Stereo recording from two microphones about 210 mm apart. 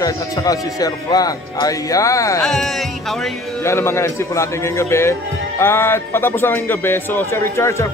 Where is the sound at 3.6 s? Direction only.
15° left (ahead or behind).